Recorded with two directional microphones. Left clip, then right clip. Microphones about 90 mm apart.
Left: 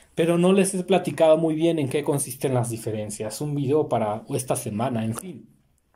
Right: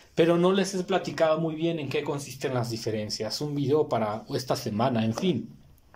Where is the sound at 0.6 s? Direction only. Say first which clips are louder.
Left 5 dB; 40° left (ahead or behind); by 2.2 s 80° left.